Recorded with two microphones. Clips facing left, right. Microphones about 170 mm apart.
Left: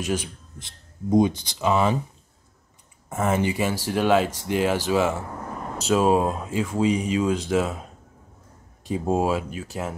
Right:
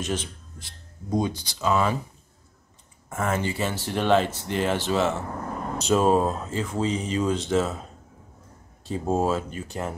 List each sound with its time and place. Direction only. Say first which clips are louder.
0.0 s speech: left 3 dB; 10° left (ahead or behind)
0.7 s speech: left 6 dB; 20° left (ahead or behind)
3.1 s speech: left 3 dB; 20° left (ahead or behind)
8.8 s speech: left 1 dB; 10° left (ahead or behind)